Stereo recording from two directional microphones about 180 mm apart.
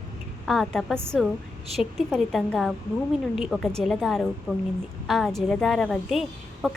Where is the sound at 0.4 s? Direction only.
Centre (ahead or behind).